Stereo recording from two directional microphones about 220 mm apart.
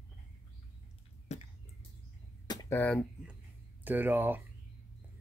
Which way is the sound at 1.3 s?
30° left (ahead or behind).